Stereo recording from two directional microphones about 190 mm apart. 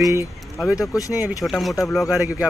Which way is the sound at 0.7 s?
15° left (ahead or behind).